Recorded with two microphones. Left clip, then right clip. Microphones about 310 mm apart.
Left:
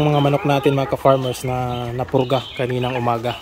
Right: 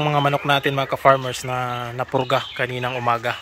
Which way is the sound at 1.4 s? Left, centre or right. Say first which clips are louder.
Left 1 dB; right.